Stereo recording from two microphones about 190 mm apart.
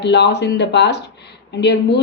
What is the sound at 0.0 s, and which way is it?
A woman's voice, 65° left (ahead or behind).